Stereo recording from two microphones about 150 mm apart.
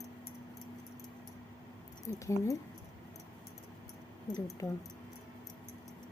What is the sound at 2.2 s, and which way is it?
Speech, 20° left (ahead or behind).